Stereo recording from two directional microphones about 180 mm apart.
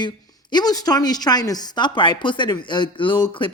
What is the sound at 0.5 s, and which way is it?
A woman's voice, 20° left (ahead or behind).